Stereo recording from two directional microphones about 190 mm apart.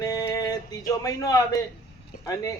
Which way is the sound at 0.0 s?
20° left (ahead or behind).